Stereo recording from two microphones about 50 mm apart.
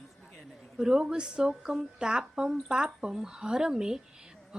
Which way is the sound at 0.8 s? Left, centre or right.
Centre.